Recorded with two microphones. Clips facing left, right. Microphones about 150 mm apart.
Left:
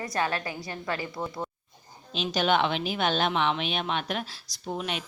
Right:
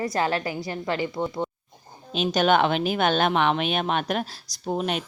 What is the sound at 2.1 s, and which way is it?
Speech, 50° right (ahead or behind).